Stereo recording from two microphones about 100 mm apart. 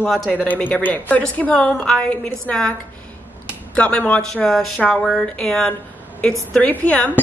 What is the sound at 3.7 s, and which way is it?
Speech, 10° left (ahead or behind).